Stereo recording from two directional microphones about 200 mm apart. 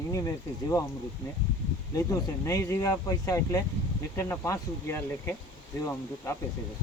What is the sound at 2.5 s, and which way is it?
Speech, 15° left (ahead or behind).